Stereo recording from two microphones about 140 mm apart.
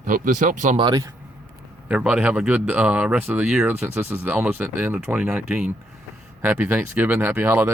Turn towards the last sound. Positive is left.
turn(degrees=-15)  # may be behind; listen again after turning